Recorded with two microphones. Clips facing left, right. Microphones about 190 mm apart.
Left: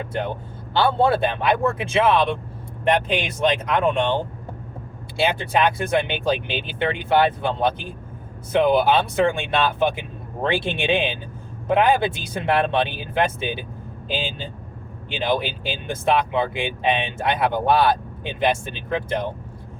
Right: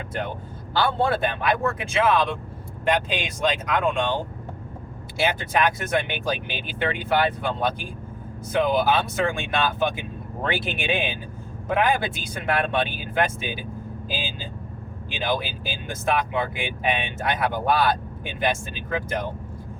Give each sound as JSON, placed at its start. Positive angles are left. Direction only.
{"t": 0.7, "sound": "speech", "side_deg": 25}
{"t": 5.1, "sound": "speech", "side_deg": 30}
{"t": 15.1, "sound": "speech", "side_deg": 30}